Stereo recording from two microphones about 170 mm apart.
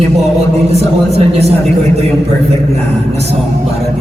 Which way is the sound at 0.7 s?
40° right (ahead or behind).